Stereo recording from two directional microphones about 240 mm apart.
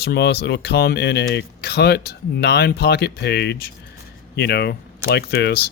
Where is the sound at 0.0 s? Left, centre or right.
Left.